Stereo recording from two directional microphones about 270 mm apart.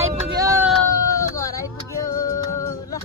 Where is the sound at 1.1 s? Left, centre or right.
Centre.